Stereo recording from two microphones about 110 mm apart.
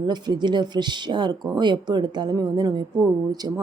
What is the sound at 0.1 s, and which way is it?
A woman's voice, 40° right (ahead or behind).